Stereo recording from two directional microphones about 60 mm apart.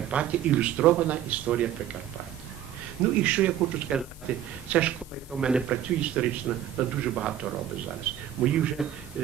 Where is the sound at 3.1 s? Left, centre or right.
Right.